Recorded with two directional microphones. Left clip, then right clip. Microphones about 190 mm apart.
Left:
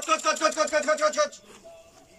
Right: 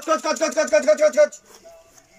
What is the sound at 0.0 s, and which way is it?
Speech, 45° right (ahead or behind).